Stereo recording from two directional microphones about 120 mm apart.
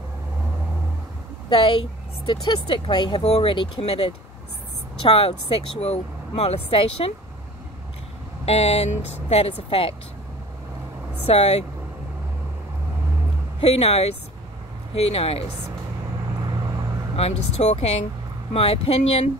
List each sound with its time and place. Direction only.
1.5 s a woman's voice: 45° left (ahead or behind)
3.2 s speech: 60° left (ahead or behind)
8.5 s speech: 60° left (ahead or behind)
11.2 s speech: 60° left (ahead or behind)
13.6 s speech: 60° left (ahead or behind)
17.2 s speech: 65° left (ahead or behind)